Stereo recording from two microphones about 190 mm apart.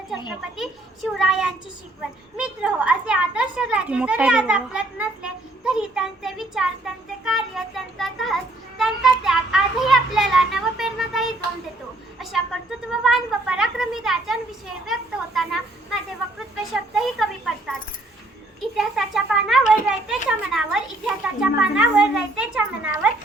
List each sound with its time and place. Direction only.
0.1 s speech: centre (ahead or behind)
8.8 s child singing: 5° right (ahead or behind)
12.9 s speech: centre (ahead or behind)
14.8 s a sound: centre (ahead or behind)
16.7 s a child's voice: centre (ahead or behind)
18.8 s speech: centre (ahead or behind)